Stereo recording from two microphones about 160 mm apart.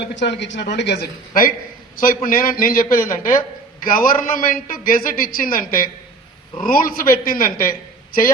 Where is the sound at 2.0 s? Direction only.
60° left (ahead or behind).